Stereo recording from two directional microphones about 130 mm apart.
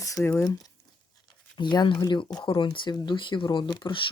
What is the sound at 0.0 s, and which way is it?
Speech, 25° left (ahead or behind).